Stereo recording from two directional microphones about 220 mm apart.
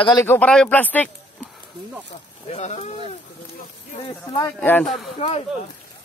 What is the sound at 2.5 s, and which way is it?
Speech, 30° left (ahead or behind).